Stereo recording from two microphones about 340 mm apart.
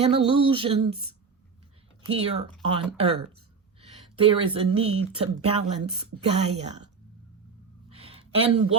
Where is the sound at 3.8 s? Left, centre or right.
Centre.